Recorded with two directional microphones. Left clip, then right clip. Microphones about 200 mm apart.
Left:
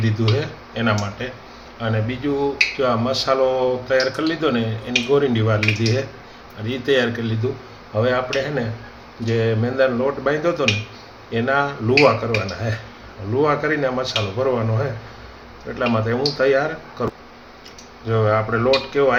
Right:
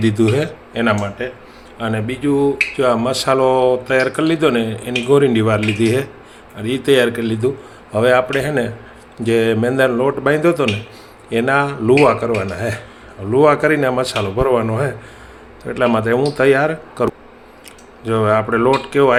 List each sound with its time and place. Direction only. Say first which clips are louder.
0.0 s speech: right 7 dB; 45° right (ahead or behind)